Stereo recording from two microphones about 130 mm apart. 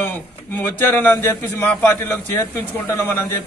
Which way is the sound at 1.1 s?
25° left (ahead or behind).